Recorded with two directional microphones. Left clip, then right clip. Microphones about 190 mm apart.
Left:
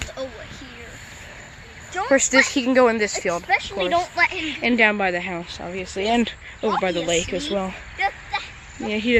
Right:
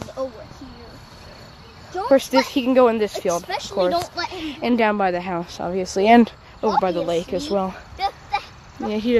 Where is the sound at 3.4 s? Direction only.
60° right (ahead or behind).